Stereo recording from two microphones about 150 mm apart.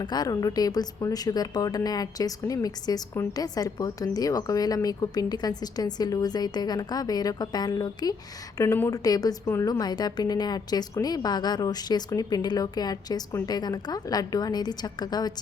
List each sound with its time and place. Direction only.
0.0 s speech: 25° left (ahead or behind)